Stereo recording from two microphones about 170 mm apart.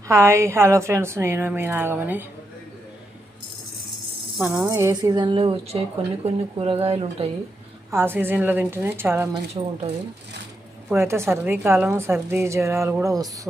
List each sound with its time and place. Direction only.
0.1 s a woman's voice: 15° right (ahead or behind)
4.4 s speech: 5° right (ahead or behind)
4.7 s a woman's voice: 20° right (ahead or behind); by 7.3 s 35° right (ahead or behind)
7.9 s a woman's voice: 15° right (ahead or behind)
9.6 s speech: 30° right (ahead or behind)
10.8 s a woman's voice: 15° right (ahead or behind)